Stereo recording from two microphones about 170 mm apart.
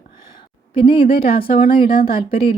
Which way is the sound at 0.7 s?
30° left (ahead or behind).